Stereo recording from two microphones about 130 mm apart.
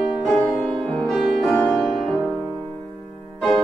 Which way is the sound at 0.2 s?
Centre (ahead or behind).